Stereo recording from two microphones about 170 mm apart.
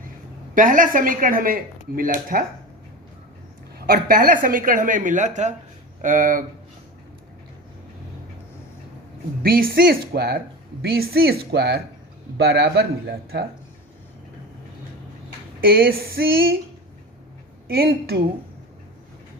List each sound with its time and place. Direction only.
0.5 s speech: 50° right (ahead or behind)
3.8 s speech: 60° right (ahead or behind)
9.4 s speech: 60° right (ahead or behind)
15.6 s speech: 60° right (ahead or behind)
17.7 s speech: 65° right (ahead or behind)